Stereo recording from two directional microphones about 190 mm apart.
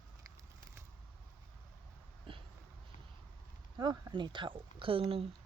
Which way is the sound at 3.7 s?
20° right (ahead or behind).